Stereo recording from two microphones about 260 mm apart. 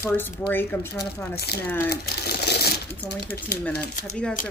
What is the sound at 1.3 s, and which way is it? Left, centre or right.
Speech, left.